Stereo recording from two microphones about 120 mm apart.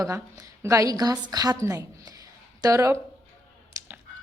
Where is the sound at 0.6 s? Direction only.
30° right (ahead or behind).